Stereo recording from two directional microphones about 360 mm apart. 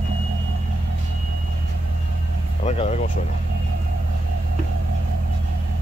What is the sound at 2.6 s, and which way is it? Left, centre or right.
Speech, centre.